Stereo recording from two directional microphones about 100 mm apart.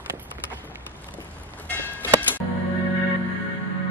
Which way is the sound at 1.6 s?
15° left (ahead or behind).